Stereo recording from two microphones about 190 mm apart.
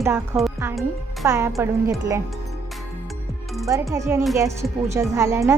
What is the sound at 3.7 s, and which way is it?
A woman's voice, 15° right (ahead or behind).